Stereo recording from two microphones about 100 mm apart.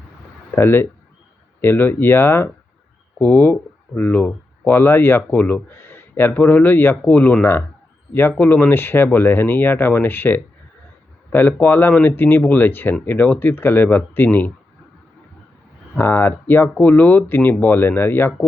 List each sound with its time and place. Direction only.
0.5 s speech: 25° left (ahead or behind)
16.0 s speech: 20° left (ahead or behind)